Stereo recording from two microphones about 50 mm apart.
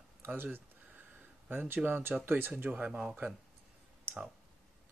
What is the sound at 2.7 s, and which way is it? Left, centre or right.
Speech, right.